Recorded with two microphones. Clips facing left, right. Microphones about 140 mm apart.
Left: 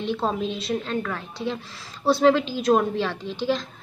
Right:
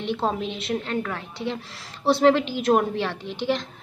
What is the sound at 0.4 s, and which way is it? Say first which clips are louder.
Speech: left 1 dB; 65° right (ahead or behind).